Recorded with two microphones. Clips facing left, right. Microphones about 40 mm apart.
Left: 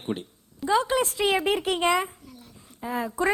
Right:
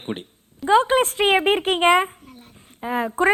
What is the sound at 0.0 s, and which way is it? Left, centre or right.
A woman's voice, right.